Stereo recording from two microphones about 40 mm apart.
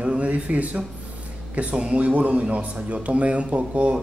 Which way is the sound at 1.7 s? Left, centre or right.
Right.